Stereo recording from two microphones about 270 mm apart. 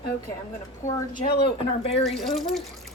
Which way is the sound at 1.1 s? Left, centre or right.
Left.